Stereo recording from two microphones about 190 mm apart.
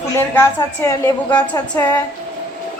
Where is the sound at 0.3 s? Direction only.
15° left (ahead or behind).